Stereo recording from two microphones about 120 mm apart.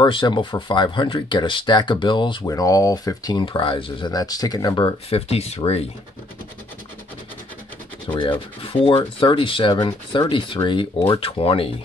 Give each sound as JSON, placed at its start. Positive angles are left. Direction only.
{"t": 0.0, "sound": "speech", "side_deg": 40}
{"t": 2.4, "sound": "speech", "side_deg": 30}
{"t": 5.1, "sound": "speech", "side_deg": 60}
{"t": 8.1, "sound": "speech", "side_deg": 35}
{"t": 8.8, "sound": "speech", "side_deg": 45}